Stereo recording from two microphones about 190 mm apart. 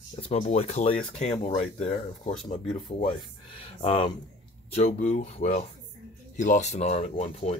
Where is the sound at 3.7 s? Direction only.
30° left (ahead or behind).